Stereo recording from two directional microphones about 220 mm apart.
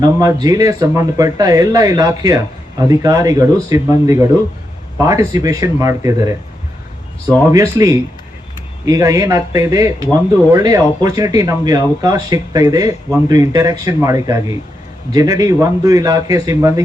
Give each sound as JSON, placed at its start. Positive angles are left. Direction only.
{"t": 0.0, "sound": "speech", "side_deg": -15}
{"t": 7.5, "sound": "speech", "side_deg": -15}